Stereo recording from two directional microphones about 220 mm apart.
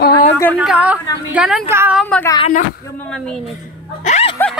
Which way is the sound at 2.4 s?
35° left (ahead or behind).